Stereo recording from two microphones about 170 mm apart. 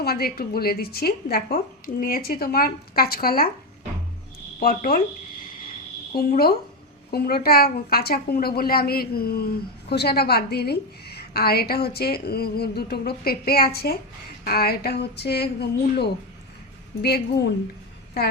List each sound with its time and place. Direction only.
0.0 s a woman's voice: 65° left (ahead or behind)
4.6 s a woman's voice: 55° left (ahead or behind)
6.1 s a woman's voice: 65° left (ahead or behind)
17.0 s a woman's voice: 70° left (ahead or behind)